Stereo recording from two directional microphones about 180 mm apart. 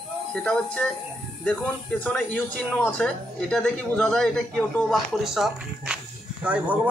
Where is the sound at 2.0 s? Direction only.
10° left (ahead or behind).